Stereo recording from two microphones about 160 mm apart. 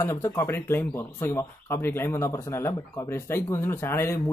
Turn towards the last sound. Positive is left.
turn(degrees=15)  # may be behind; listen again after turning